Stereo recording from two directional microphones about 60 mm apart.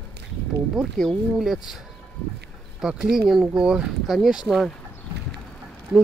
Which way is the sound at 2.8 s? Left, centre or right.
Centre.